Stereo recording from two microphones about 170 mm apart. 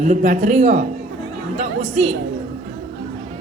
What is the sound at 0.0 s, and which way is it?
Speech, 50° right (ahead or behind).